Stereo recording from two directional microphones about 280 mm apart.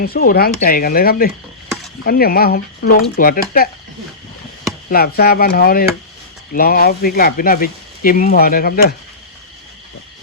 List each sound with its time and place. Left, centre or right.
0.0 s speech: left
4.9 s speech: left